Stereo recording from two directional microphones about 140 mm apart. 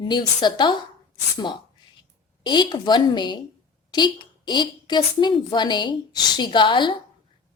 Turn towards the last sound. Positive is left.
turn(degrees=35)  # may be behind; listen again after turning